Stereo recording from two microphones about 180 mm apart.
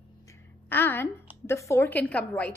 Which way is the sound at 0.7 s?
10° left (ahead or behind).